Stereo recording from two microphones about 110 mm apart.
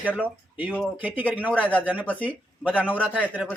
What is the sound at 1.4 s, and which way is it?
Speech, 15° right (ahead or behind).